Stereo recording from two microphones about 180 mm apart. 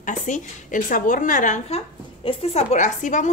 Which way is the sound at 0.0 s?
45° left (ahead or behind).